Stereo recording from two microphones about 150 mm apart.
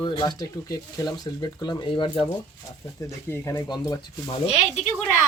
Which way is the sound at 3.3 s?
20° left (ahead or behind).